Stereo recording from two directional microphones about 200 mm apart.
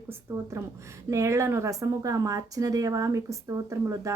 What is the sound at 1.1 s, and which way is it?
Speech, 15° right (ahead or behind).